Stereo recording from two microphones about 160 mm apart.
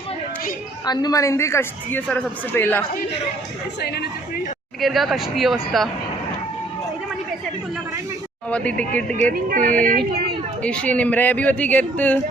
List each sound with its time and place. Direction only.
0.9 s a woman's voice: 25° left (ahead or behind)
3.8 s a woman's voice: 90° left
4.8 s speech: centre (ahead or behind)
8.4 s a woman's voice: 10° left (ahead or behind)
9.3 s speech: 60° right (ahead or behind)
10.6 s a woman's voice: 10° left (ahead or behind)